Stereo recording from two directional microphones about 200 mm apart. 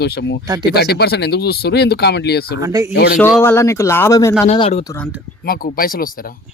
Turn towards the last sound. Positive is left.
turn(degrees=45)  # may be behind; listen again after turning